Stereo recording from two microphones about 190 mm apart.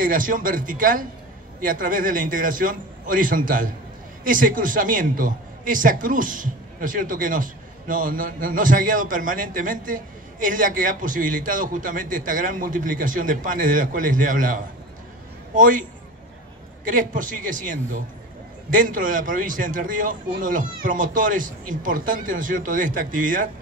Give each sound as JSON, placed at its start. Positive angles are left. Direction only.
{"t": 0.0, "sound": "a man's voice", "side_deg": -45}
{"t": 16.8, "sound": "a man's voice", "side_deg": -45}